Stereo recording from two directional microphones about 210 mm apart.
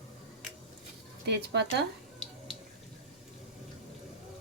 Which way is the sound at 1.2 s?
55° right (ahead or behind).